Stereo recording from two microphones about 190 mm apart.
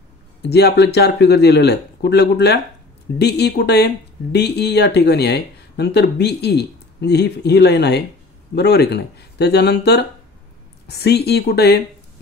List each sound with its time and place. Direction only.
0.4 s speech: 60° left (ahead or behind)